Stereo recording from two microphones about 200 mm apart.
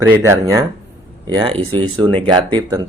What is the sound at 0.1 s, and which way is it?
Speech, 15° right (ahead or behind).